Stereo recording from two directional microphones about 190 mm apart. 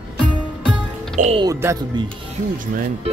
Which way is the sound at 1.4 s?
15° right (ahead or behind).